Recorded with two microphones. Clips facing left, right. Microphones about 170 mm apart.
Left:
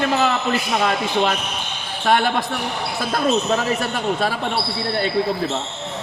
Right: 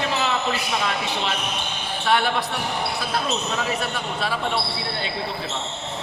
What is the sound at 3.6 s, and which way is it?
Speech, 45° left (ahead or behind).